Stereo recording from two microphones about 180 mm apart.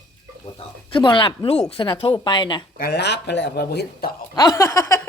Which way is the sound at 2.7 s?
60° left (ahead or behind).